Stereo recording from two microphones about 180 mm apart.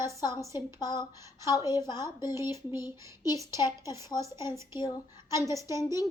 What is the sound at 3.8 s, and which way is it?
Speech, 20° left (ahead or behind).